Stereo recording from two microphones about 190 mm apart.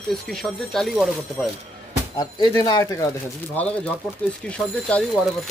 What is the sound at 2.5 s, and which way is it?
Speech, 20° left (ahead or behind).